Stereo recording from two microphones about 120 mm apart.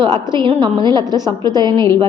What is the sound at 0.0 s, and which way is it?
A woman's voice, 40° right (ahead or behind).